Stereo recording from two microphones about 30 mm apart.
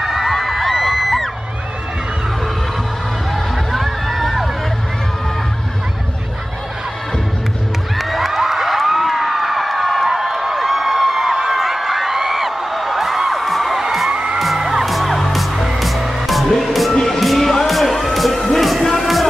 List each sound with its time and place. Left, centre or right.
0.0 s crowd: centre
1.0 s music: centre
3.7 s music: centre
8.0 s a sound: centre
10.0 s a sound: centre
13.7 s music: centre
14.1 s music: right
14.6 s music: centre
14.9 s music: centre
16.9 s music: left
17.2 s music: centre